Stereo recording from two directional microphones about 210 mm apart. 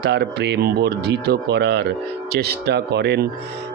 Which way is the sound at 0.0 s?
50° right (ahead or behind).